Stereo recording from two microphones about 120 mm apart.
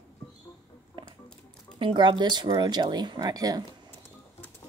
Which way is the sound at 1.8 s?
40° right (ahead or behind).